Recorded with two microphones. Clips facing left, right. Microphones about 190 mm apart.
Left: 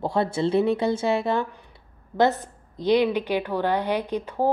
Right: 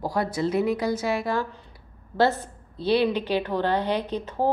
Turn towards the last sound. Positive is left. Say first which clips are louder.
# left 1 dB
turn(degrees=10)  # may be behind; listen again after turning